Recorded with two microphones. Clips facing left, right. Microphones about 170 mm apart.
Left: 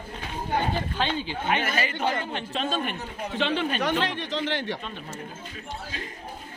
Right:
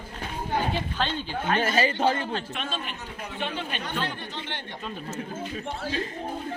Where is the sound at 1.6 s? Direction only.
30° right (ahead or behind).